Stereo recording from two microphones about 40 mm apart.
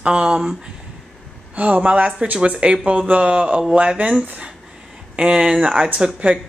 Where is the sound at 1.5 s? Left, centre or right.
Right.